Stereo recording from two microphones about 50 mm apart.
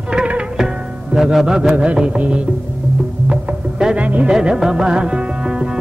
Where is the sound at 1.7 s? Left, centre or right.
Right.